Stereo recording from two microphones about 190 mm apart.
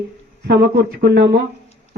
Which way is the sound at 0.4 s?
55° right (ahead or behind).